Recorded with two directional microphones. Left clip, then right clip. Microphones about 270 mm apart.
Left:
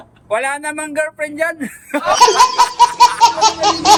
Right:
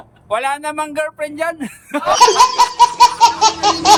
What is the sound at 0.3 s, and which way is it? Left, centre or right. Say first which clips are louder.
A man's voice: even; centre.